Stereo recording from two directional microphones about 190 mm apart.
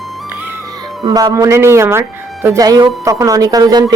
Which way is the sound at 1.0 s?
20° right (ahead or behind).